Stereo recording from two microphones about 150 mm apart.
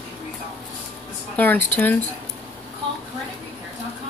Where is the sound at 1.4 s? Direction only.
10° left (ahead or behind).